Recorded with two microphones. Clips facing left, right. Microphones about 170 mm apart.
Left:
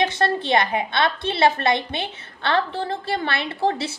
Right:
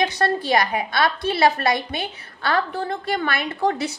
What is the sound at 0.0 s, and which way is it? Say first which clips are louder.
A woman's voice: even; 25° left (ahead or behind).